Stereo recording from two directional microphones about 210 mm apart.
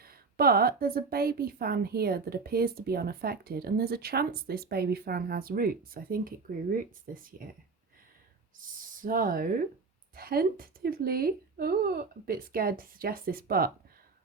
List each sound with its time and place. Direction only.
0.0 s a woman's voice: 45° right (ahead or behind)
8.5 s a woman's voice: 40° right (ahead or behind)